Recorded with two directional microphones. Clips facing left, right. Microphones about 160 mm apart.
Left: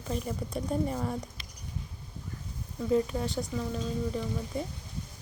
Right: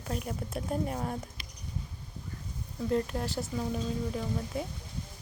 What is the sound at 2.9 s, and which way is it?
Speech, centre (ahead or behind).